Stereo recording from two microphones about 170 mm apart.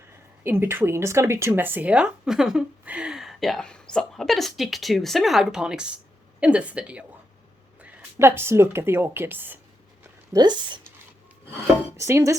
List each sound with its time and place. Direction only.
0.4 s a woman's voice: 15° right (ahead or behind)
10.3 s speech: 25° right (ahead or behind)
11.9 s a woman's voice: 15° right (ahead or behind)